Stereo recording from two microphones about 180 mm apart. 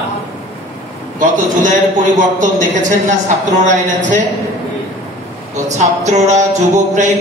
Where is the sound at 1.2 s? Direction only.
45° right (ahead or behind).